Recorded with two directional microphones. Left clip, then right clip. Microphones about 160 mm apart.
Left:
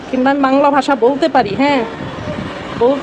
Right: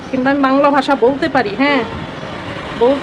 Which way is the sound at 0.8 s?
10° left (ahead or behind).